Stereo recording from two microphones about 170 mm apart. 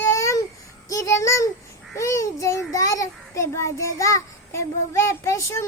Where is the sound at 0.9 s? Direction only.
20° left (ahead or behind).